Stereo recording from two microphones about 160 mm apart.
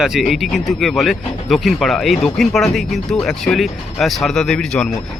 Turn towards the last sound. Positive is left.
turn(degrees=5)  # may be behind; listen again after turning